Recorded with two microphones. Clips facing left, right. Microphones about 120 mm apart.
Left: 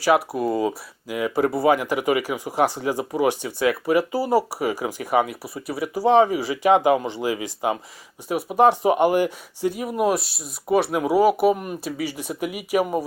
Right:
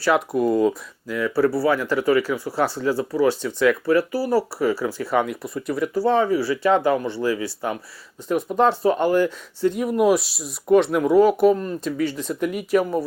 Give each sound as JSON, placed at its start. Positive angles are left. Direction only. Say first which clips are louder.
{"t": 0.3, "sound": "speech", "louder": "right 4 dB", "side_deg": 0}
{"t": 1.0, "sound": "speech", "louder": "right 2 dB", "side_deg": 15}
{"t": 5.2, "sound": "speech", "louder": "right 3 dB", "side_deg": 5}
{"t": 9.7, "sound": "speech", "louder": "right 4 dB", "side_deg": 0}